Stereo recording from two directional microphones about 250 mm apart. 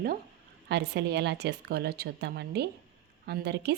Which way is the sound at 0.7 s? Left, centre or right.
Right.